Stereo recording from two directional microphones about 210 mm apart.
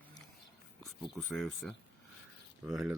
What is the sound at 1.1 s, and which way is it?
Speech, centre (ahead or behind).